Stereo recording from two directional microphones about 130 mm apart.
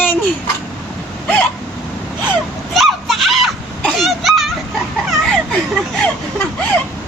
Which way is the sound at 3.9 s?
Centre (ahead or behind).